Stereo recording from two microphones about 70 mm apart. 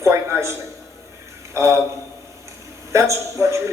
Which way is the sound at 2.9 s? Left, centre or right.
Right.